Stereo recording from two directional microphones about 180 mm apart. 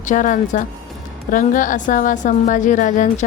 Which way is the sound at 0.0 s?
45° left (ahead or behind).